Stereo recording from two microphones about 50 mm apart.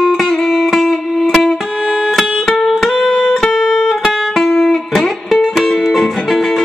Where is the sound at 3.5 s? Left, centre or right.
Centre.